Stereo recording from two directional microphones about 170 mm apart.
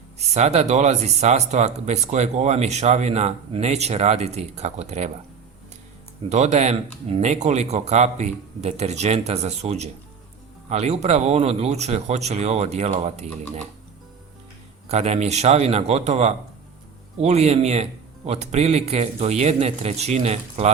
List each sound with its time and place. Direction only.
0.3 s speech: 40° right (ahead or behind)
6.2 s speech: 40° right (ahead or behind)
14.8 s speech: 40° right (ahead or behind)